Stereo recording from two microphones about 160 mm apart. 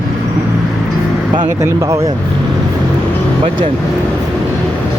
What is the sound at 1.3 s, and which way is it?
Speech, 30° right (ahead or behind).